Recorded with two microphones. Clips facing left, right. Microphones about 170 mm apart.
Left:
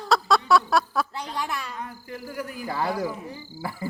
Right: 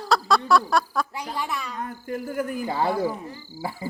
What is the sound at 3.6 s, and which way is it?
Speech, 20° right (ahead or behind).